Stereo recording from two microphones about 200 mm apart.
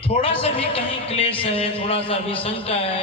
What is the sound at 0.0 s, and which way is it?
A man's voice, 30° left (ahead or behind).